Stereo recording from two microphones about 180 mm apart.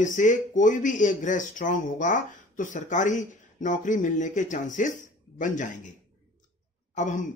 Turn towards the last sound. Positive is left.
turn(degrees=45)  # may be behind; listen again after turning